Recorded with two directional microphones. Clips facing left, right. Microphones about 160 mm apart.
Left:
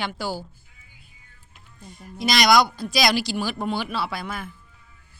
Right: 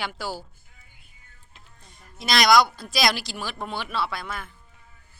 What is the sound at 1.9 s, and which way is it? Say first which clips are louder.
Speech: left 2 dB; centre (ahead or behind).